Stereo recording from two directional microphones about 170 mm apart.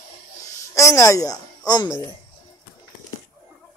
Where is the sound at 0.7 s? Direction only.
20° left (ahead or behind).